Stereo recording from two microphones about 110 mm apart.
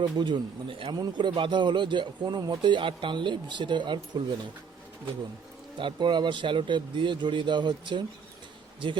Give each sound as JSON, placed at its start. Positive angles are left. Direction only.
{"t": 0.0, "sound": "a man's voice", "side_deg": -45}
{"t": 5.7, "sound": "a man's voice", "side_deg": -45}